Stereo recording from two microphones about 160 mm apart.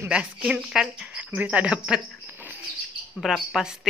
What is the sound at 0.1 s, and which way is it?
A woman's voice, 5° right (ahead or behind).